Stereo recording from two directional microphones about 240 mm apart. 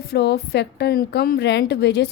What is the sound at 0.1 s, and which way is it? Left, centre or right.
A woman's voice, left.